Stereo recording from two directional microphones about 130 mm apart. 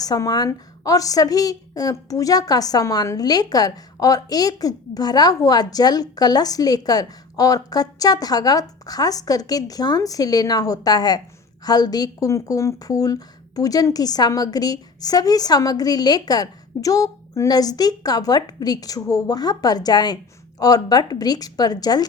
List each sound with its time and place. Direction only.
0.0 s a woman's voice: 30° left (ahead or behind)